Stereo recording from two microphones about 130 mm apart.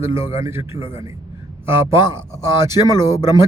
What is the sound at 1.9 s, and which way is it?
Speech, 35° left (ahead or behind).